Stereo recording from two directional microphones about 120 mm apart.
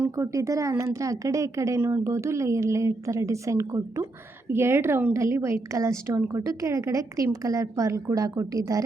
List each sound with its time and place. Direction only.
0.2 s speech: 25° right (ahead or behind)